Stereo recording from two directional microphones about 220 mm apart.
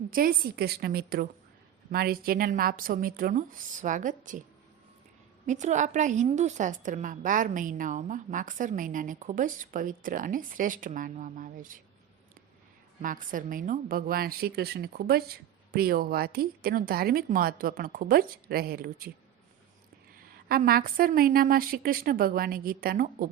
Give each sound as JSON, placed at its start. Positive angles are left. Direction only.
{"t": 0.1, "sound": "a woman's voice", "side_deg": -40}
{"t": 5.5, "sound": "a woman's voice", "side_deg": -35}
{"t": 13.0, "sound": "a woman's voice", "side_deg": -35}
{"t": 20.5, "sound": "a woman's voice", "side_deg": -40}